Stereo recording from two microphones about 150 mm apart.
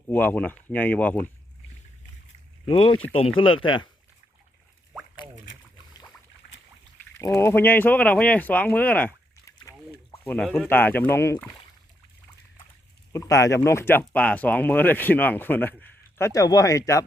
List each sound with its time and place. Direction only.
0.1 s speech: 10° left (ahead or behind)
2.6 s speech: 35° left (ahead or behind)
7.2 s speech: 20° left (ahead or behind)
9.7 s a sound: 20° left (ahead or behind)
10.2 s speech: 5° left (ahead or behind)
13.1 s speech: 20° left (ahead or behind)